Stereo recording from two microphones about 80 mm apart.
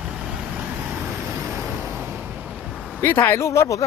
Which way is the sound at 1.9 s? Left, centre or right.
Right.